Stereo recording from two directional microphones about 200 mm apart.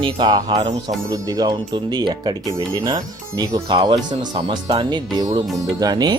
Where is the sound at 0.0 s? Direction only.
20° right (ahead or behind).